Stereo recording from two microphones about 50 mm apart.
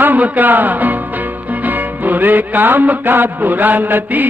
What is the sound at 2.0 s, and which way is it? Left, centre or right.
Speech, right.